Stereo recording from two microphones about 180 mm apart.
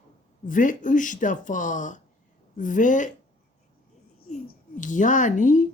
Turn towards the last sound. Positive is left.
turn(degrees=45)  # may be behind; listen again after turning